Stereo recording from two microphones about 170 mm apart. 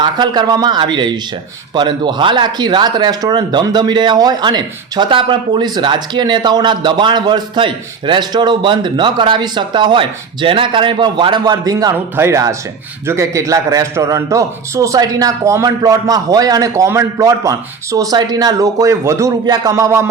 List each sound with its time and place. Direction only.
0.0 s speech: 25° right (ahead or behind)